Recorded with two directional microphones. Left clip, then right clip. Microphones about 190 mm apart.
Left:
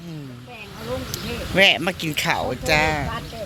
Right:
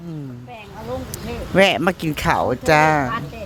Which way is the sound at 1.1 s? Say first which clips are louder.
Right 4 dB; 35° right (ahead or behind).